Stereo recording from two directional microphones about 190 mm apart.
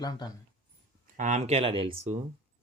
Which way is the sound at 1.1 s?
40° right (ahead or behind).